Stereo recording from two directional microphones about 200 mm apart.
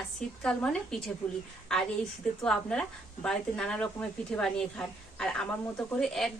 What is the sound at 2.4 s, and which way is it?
A woman's voice, 5° left (ahead or behind).